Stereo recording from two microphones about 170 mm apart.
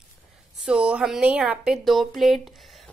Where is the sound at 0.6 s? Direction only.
5° right (ahead or behind).